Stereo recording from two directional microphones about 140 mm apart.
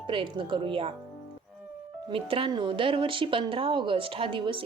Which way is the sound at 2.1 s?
40° right (ahead or behind).